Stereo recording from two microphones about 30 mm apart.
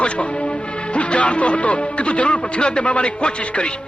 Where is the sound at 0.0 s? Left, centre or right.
Left.